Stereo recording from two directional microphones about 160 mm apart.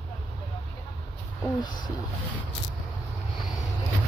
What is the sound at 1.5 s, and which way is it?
Speech, 30° left (ahead or behind).